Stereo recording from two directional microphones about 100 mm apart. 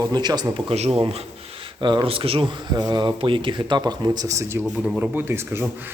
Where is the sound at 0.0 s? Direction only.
45° right (ahead or behind).